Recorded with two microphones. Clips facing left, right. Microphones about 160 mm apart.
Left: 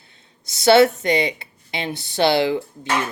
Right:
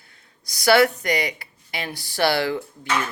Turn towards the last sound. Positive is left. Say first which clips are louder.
# left 2 dB
turn(degrees=20)  # may be behind; listen again after turning